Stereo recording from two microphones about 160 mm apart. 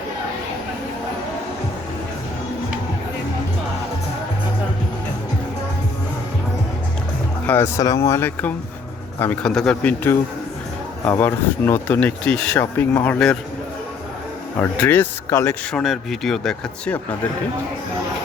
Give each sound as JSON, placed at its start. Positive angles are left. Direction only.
{"t": 7.4, "sound": "speech", "side_deg": 15}
{"t": 14.6, "sound": "speech", "side_deg": 10}
{"t": 15.7, "sound": "speech", "side_deg": 0}